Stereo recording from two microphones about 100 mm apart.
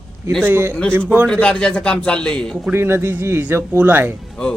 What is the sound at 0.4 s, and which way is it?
Speech, 25° right (ahead or behind).